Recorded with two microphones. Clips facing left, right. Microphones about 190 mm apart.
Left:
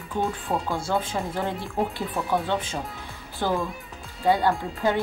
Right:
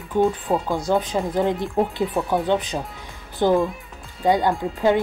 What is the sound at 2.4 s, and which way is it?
Speech, 15° right (ahead or behind).